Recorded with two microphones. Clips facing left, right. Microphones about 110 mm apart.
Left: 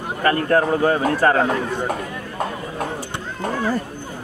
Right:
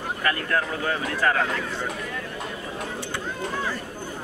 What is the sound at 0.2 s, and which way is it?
Speech, 35° left (ahead or behind).